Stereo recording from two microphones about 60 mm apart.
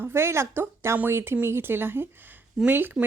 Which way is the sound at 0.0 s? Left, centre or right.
Right.